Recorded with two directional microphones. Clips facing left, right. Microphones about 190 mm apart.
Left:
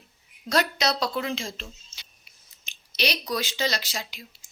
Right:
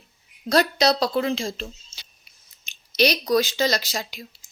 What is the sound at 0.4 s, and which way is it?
A woman's voice, 35° right (ahead or behind).